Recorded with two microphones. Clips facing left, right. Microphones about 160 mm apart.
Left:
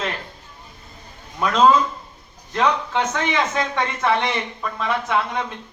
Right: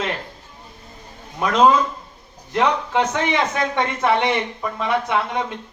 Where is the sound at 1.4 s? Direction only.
15° right (ahead or behind).